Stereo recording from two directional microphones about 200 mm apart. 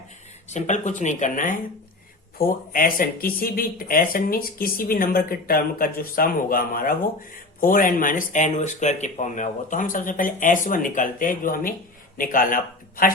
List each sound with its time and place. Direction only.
0.4 s speech: 35° left (ahead or behind)